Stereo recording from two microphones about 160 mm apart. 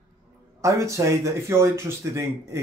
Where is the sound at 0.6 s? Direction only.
20° right (ahead or behind).